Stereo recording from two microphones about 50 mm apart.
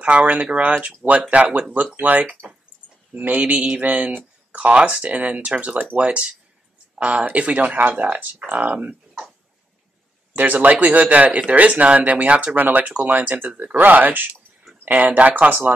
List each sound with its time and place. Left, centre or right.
0.3 s speech: right
10.3 s speech: right
14.3 s a sound: centre
14.9 s speech: right